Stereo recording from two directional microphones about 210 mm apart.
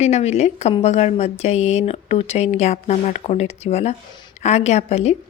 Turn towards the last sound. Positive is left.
turn(degrees=30)  # may be behind; listen again after turning